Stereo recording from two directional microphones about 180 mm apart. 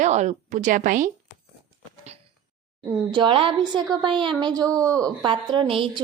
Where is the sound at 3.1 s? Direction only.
30° right (ahead or behind).